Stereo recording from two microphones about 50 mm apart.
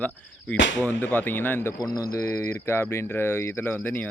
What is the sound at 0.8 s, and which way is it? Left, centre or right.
Speech, left.